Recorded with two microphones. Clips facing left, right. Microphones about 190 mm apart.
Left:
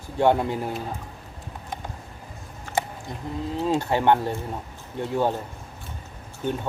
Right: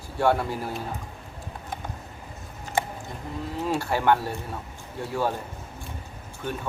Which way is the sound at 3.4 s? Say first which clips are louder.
Left 3 dB; 20° left (ahead or behind).